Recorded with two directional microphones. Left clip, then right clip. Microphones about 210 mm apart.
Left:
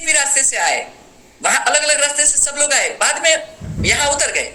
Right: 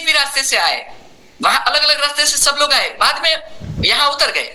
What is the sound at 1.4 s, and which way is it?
Speech, 55° right (ahead or behind).